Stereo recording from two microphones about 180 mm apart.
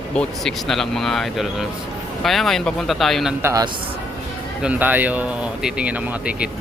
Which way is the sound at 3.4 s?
20° right (ahead or behind).